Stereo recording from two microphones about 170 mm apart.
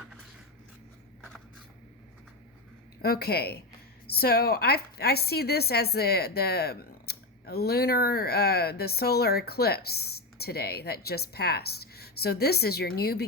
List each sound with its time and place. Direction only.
3.0 s a woman's voice: 65° left (ahead or behind)